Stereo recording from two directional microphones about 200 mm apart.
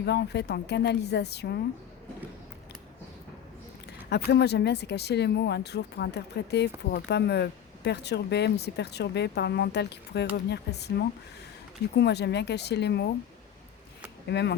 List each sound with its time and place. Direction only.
0.0 s speech: 55° left (ahead or behind)
4.1 s speech: 55° left (ahead or behind)
14.3 s speech: 55° left (ahead or behind)